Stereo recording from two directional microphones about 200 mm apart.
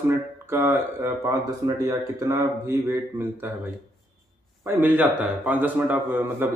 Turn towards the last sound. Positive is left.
turn(degrees=-10)  # may be behind; listen again after turning